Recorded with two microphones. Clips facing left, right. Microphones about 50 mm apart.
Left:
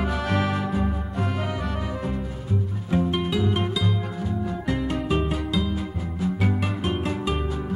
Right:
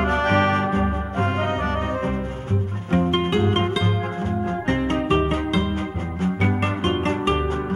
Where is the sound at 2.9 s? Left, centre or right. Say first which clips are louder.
Right 4 dB; right.